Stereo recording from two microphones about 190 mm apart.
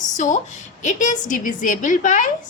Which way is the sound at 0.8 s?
40° left (ahead or behind).